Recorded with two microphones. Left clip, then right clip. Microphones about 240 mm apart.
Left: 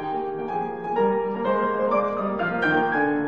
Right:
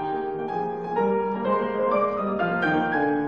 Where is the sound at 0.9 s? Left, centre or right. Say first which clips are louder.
Left 2 dB; left.